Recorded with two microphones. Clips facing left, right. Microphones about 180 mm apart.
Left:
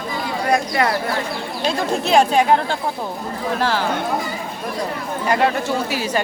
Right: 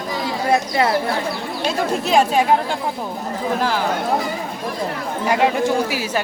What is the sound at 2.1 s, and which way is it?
Speech, 5° right (ahead or behind).